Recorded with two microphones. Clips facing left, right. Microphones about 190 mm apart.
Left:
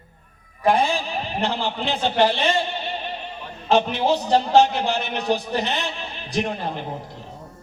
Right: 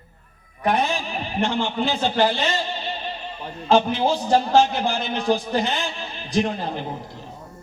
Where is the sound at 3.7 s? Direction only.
65° left (ahead or behind).